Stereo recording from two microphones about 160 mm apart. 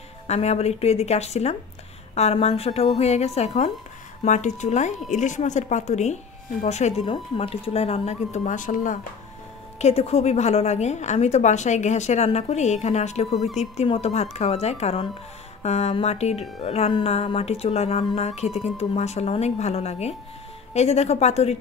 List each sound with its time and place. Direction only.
0.3 s a woman's voice: 40° left (ahead or behind)
9.8 s a woman's voice: 40° left (ahead or behind)